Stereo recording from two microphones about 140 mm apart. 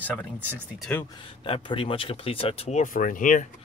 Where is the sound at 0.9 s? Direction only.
10° left (ahead or behind).